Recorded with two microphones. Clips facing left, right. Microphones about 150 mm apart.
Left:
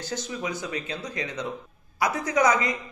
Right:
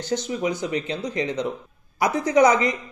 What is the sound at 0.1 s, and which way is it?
A woman's voice, 25° right (ahead or behind).